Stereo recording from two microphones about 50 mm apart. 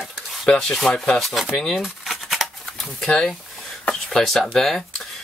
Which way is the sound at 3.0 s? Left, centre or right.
Centre.